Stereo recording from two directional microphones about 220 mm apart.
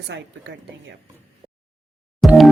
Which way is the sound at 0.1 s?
55° right (ahead or behind).